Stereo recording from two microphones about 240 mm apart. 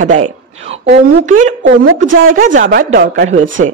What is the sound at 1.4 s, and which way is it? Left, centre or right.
A woman's voice, right.